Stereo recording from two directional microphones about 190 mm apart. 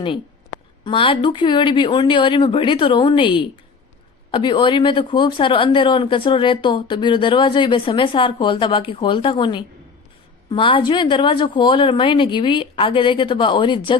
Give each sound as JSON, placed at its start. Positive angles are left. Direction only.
{"t": 0.9, "sound": "speech", "side_deg": 25}